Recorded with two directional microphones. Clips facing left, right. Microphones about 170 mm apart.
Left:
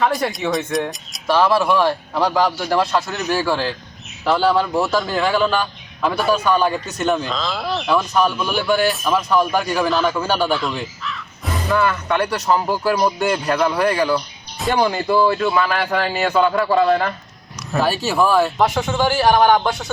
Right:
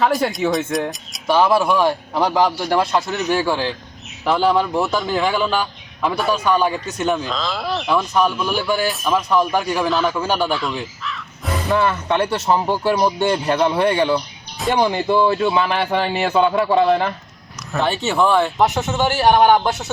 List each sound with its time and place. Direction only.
0.0 s a man's voice: centre (ahead or behind)
1.3 s a man's voice: 15° right (ahead or behind)
2.9 s a man's voice: 5° left (ahead or behind)
3.4 s a man's voice: 15° right (ahead or behind)
4.6 s a man's voice: 5° left (ahead or behind)
4.9 s a man's voice: 15° right (ahead or behind)
6.6 s a man's voice: 10° right (ahead or behind)
7.3 s a man's voice: centre (ahead or behind)
8.4 s a man's voice: 10° right (ahead or behind)
8.9 s a man's voice: centre (ahead or behind)
10.2 s a man's voice: 15° right (ahead or behind)
10.5 s speech: centre (ahead or behind)
11.7 s a man's voice: 25° right (ahead or behind)
18.0 s a man's voice: 5° left (ahead or behind)